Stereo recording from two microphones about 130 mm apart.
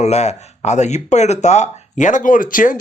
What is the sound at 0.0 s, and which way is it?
Speech, 55° left (ahead or behind).